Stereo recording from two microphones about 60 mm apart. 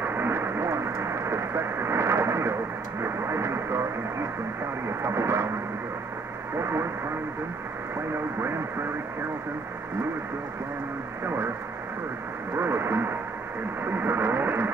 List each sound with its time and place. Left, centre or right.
0.0 s radio: right
5.0 s speech: right
6.6 s speech: right
12.5 s speech: right